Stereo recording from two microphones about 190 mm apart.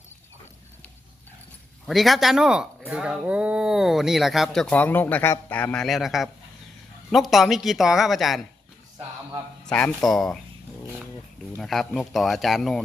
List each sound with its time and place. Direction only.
1.9 s speech: centre (ahead or behind)
9.6 s speech: 5° left (ahead or behind)
11.5 s speech: centre (ahead or behind)